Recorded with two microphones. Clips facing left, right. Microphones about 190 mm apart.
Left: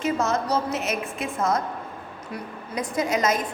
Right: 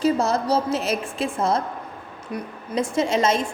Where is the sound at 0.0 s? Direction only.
35° right (ahead or behind).